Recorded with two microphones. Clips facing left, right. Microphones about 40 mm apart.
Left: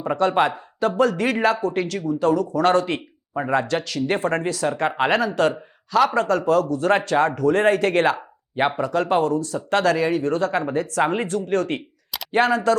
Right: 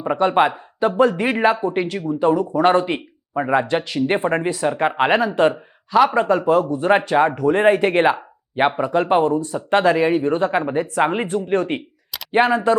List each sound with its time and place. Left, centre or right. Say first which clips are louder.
0.0 s speech: right 3 dB; centre